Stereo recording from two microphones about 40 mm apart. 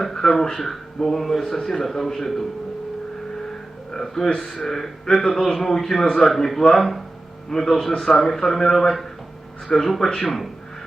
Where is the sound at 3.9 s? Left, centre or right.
Centre.